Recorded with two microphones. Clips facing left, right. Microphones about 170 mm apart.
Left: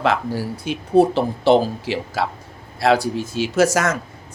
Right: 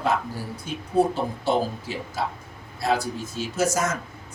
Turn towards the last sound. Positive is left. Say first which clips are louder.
# left 7 dB
turn(degrees=85)